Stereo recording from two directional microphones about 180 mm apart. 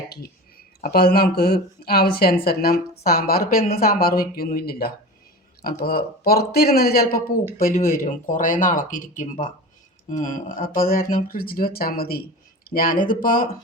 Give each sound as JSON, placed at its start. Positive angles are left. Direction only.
{"t": 0.1, "sound": "speech", "side_deg": 60}